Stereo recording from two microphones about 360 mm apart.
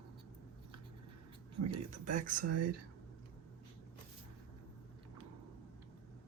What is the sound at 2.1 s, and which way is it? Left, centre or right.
Speech, right.